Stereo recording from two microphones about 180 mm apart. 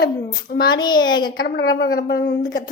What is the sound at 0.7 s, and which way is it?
Speech, 25° left (ahead or behind).